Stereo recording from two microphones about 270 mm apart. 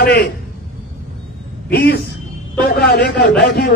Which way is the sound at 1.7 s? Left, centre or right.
Left.